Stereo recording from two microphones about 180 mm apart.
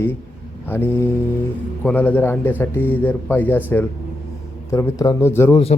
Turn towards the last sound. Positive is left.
turn(degrees=15)  # may be behind; listen again after turning